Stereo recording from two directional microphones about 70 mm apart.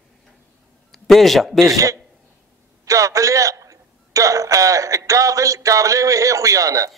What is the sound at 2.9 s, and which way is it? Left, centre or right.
A man's voice, right.